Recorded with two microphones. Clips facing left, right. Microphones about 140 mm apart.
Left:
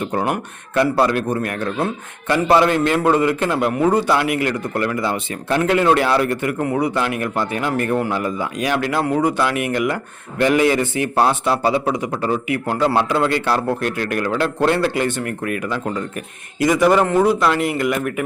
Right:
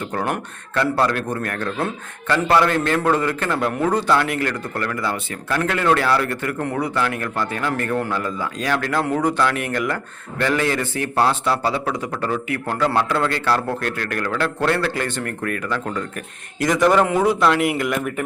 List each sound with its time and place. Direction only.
0.0 s a man's voice: 20° left (ahead or behind); by 18.1 s centre (ahead or behind)